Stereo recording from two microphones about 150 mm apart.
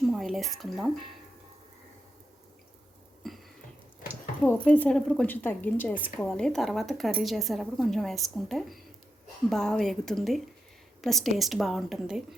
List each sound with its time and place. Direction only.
0.1 s speech: centre (ahead or behind)
3.2 s a sound: centre (ahead or behind)
4.4 s a woman's voice: 10° left (ahead or behind)